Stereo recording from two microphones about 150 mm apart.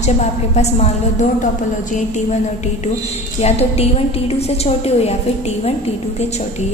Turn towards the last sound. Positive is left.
turn(degrees=45)  # may be behind; listen again after turning